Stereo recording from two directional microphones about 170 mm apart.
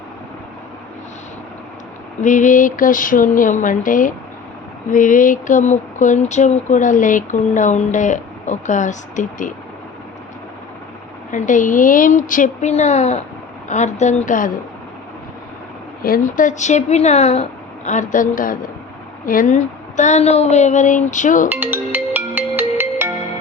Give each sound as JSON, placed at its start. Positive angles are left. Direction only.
{"t": 2.2, "sound": "speech", "side_deg": 50}
{"t": 11.3, "sound": "speech", "side_deg": 50}
{"t": 16.0, "sound": "speech", "side_deg": 55}
{"t": 21.5, "sound": "music", "side_deg": -10}